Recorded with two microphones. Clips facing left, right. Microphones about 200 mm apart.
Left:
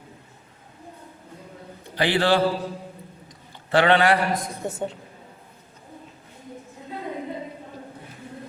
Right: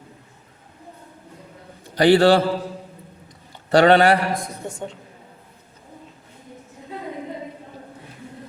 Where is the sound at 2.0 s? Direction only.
40° right (ahead or behind).